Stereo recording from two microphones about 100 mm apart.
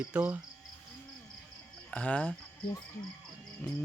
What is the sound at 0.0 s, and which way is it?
Speech, 15° right (ahead or behind).